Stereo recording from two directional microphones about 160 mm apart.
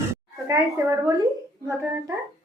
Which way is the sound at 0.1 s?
20° right (ahead or behind).